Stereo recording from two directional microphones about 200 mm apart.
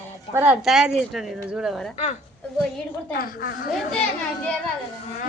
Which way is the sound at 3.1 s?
45° left (ahead or behind).